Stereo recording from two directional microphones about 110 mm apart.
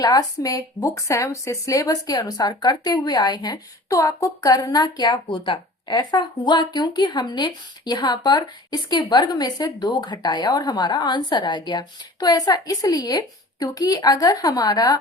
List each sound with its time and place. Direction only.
0.0 s speech: 35° left (ahead or behind)